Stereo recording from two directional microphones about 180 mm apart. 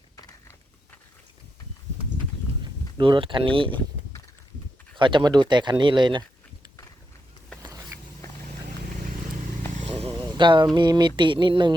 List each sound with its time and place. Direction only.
0.2 s a sound: 20° left (ahead or behind)
3.0 s speech: 25° right (ahead or behind)
4.9 s speech: 25° right (ahead or behind)
7.6 s a sound: 20° right (ahead or behind)
9.7 s motorcycle: 40° right (ahead or behind)
10.1 s vehicle: 25° right (ahead or behind)
10.8 s speech: 25° right (ahead or behind)